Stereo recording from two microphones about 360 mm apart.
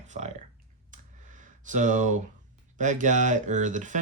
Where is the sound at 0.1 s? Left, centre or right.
Centre.